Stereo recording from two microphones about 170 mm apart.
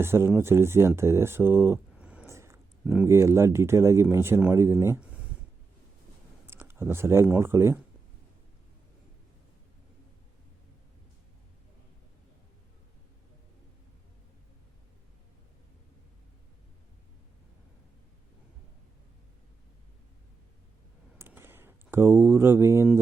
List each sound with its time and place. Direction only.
0.0 s speech: 15° right (ahead or behind)
6.5 s speech: 15° right (ahead or behind)
21.2 s a sound: 15° right (ahead or behind)